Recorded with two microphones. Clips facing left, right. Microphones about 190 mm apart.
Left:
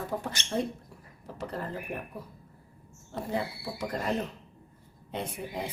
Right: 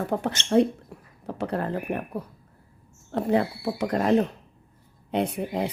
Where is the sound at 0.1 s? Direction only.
70° right (ahead or behind).